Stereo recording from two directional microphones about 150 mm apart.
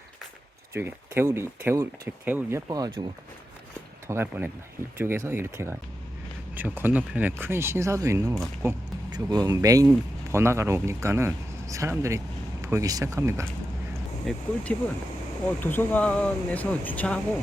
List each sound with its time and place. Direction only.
0.7 s speech: 15° right (ahead or behind)
4.0 s speech: 15° right (ahead or behind)
14.3 s speech: 10° left (ahead or behind)